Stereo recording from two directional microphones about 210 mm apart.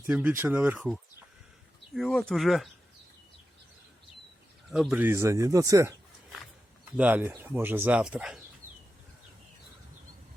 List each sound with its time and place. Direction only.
0.1 s speech: 5° right (ahead or behind)
4.7 s speech: 5° right (ahead or behind)
6.9 s speech: 5° right (ahead or behind)